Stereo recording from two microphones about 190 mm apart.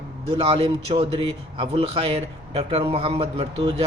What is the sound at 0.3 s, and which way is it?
Speech, 30° right (ahead or behind).